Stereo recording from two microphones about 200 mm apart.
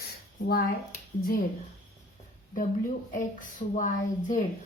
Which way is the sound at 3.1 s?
40° left (ahead or behind).